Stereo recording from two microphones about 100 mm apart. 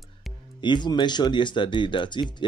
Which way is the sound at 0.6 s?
50° left (ahead or behind).